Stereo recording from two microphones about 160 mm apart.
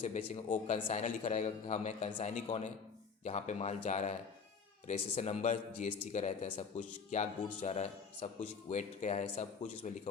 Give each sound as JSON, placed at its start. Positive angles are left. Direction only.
{"t": 0.0, "sound": "speech", "side_deg": 40}